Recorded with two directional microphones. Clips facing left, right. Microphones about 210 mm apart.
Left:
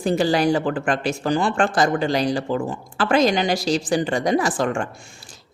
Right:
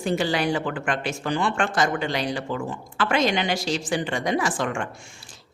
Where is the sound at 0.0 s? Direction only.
35° left (ahead or behind).